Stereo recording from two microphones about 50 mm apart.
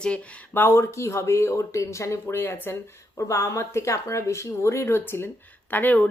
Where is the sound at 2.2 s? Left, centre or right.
Left.